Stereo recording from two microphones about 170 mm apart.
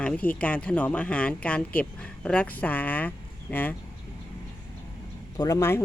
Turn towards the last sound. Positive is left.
turn(degrees=15)  # may be behind; listen again after turning